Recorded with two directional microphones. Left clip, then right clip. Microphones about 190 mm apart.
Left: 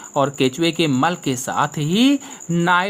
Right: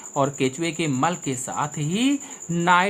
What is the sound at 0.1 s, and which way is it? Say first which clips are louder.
Speech: left 4 dB; 25° left (ahead or behind).